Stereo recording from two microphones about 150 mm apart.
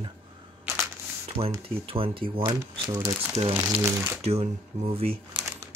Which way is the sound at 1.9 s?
35° right (ahead or behind).